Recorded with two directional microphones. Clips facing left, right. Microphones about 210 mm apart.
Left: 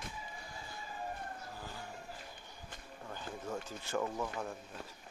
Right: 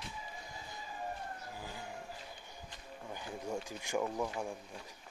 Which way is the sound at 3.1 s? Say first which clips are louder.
Right 1 dB; 15° right (ahead or behind).